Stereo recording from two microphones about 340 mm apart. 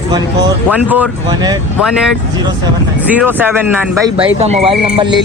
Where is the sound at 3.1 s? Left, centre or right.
Centre.